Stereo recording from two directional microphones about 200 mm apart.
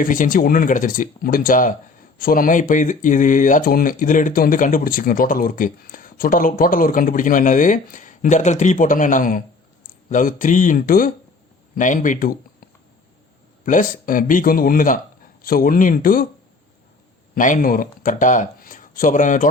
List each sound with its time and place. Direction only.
0.0 s speech: 45° left (ahead or behind)
13.7 s speech: 40° left (ahead or behind)
17.3 s speech: 40° left (ahead or behind)